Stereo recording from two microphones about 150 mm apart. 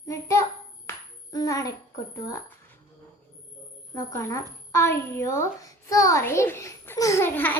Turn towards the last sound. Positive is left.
turn(degrees=15)  # may be behind; listen again after turning